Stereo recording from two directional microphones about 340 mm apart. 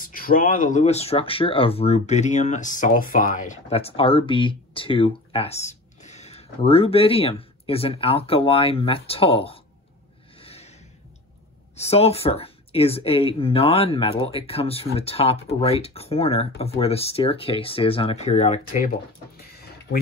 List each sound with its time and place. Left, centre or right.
0.0 s speech: left
10.4 s a sound: centre
11.7 s speech: centre